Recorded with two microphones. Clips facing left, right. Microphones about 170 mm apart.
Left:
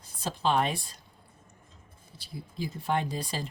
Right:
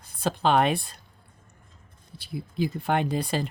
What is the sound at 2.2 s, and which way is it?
Speech, 65° right (ahead or behind).